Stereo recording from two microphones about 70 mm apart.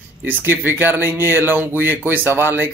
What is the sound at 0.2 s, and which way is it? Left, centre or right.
Speech, right.